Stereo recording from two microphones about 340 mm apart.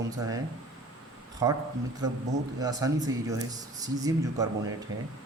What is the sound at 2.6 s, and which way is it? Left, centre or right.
A man's voice, centre.